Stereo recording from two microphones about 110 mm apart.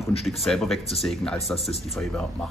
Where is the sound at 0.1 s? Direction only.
70° left (ahead or behind).